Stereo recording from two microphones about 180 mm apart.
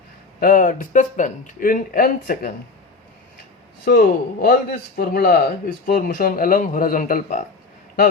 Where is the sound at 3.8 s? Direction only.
55° left (ahead or behind).